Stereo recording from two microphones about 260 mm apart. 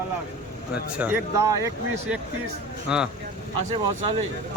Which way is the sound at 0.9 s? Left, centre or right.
Centre.